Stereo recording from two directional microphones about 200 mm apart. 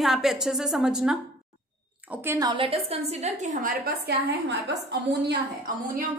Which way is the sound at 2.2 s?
15° right (ahead or behind).